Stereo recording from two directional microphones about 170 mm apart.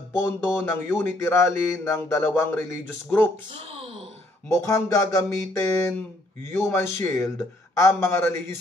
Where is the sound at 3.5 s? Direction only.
35° right (ahead or behind).